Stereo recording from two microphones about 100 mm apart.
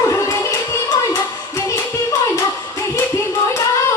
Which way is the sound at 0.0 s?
30° left (ahead or behind).